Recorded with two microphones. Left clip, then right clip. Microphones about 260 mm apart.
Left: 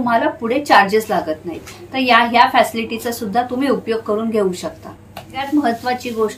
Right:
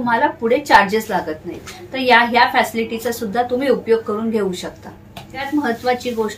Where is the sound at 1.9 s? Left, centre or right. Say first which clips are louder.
Even; centre.